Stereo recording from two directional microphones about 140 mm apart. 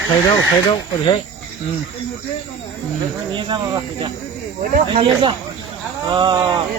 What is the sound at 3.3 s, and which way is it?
Speech, 35° right (ahead or behind).